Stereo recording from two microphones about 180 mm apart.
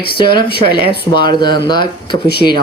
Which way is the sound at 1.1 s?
25° left (ahead or behind).